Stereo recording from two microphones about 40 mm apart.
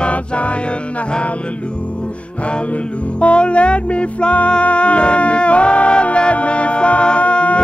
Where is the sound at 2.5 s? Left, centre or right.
Left.